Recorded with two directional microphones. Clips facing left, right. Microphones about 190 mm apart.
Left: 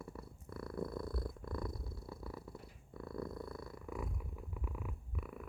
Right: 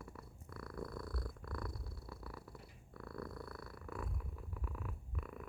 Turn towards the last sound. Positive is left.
turn(degrees=10)  # may be behind; listen again after turning